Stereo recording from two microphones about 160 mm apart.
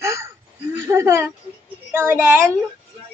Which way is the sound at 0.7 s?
15° right (ahead or behind).